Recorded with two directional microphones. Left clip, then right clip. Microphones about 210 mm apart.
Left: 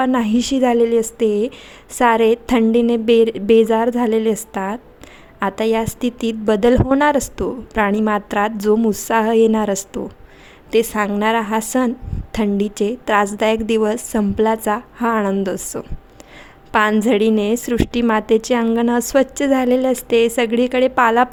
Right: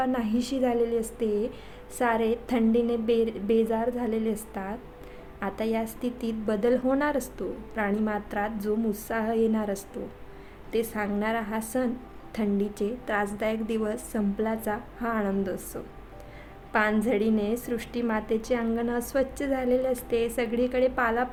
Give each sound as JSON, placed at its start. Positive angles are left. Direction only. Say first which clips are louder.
{"t": 0.0, "sound": "a woman's voice", "louder": "left 10 dB", "side_deg": 45}